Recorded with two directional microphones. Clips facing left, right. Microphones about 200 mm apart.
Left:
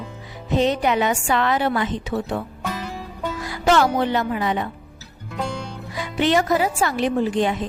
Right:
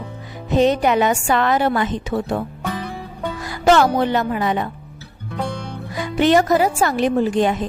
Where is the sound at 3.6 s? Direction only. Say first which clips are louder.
Right 3 dB; 45° right (ahead or behind).